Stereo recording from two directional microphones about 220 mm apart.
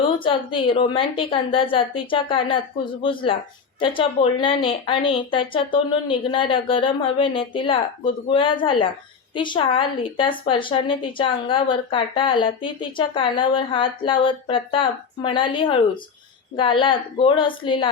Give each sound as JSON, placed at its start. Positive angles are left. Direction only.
{"t": 0.0, "sound": "a woman's voice", "side_deg": 25}